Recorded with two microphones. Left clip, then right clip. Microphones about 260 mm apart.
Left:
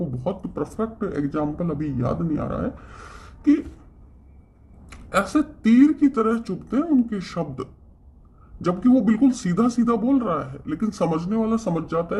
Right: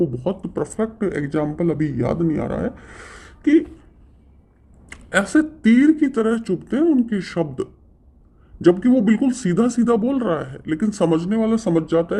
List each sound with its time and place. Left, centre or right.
0.2 s speech: right
4.9 s speech: right